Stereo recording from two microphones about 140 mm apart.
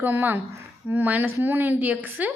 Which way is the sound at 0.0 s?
15° right (ahead or behind).